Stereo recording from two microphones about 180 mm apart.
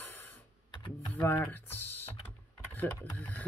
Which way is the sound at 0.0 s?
10° left (ahead or behind).